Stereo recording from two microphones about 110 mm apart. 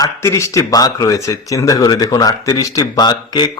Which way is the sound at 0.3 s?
25° left (ahead or behind).